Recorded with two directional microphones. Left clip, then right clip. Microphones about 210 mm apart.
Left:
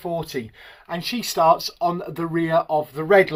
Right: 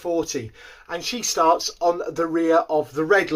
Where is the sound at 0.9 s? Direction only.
45° left (ahead or behind).